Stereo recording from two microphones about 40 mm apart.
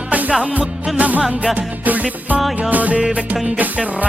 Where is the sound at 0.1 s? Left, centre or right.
Right.